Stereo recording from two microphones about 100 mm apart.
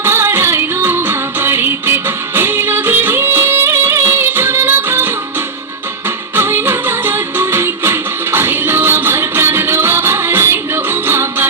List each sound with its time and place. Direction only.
0.0 s music: 25° right (ahead or behind)
6.3 s music: 25° right (ahead or behind)